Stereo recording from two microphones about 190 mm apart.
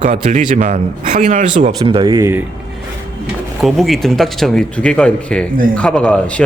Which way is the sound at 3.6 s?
Centre (ahead or behind).